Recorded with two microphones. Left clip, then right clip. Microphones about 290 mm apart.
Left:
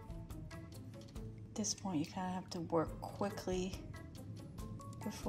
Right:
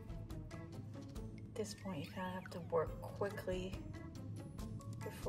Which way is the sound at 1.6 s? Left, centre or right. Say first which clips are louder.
Left 5 dB; left.